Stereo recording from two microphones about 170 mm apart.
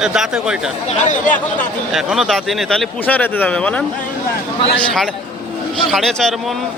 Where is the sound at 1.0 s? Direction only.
45° left (ahead or behind).